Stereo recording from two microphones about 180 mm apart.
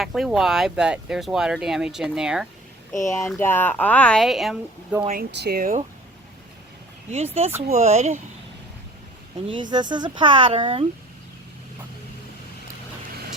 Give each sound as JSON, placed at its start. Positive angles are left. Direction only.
{"t": 0.0, "sound": "speech", "side_deg": 0}
{"t": 3.0, "sound": "speech", "side_deg": 15}
{"t": 5.1, "sound": "speech", "side_deg": -65}
{"t": 7.1, "sound": "speech", "side_deg": -35}
{"t": 9.5, "sound": "speech", "side_deg": -25}